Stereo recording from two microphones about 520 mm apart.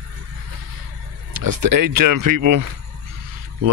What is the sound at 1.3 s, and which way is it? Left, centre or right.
Speech, right.